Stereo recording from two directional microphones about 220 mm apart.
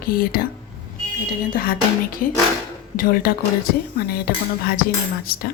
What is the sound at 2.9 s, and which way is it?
Speech, 40° left (ahead or behind).